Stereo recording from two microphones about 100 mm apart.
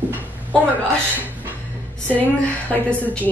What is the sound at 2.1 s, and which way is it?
Speech, 15° left (ahead or behind).